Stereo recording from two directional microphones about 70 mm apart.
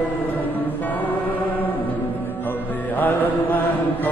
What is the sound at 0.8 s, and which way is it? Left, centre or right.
Music, left.